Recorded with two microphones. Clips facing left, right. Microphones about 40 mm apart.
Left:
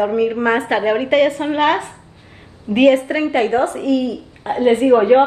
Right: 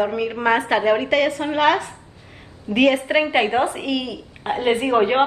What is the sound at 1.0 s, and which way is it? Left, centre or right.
Speech, centre.